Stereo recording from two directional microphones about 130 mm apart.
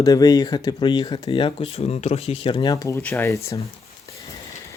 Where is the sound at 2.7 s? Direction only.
25° left (ahead or behind).